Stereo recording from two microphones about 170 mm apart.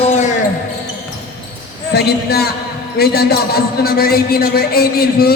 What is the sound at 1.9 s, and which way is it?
A woman's voice, 70° left (ahead or behind).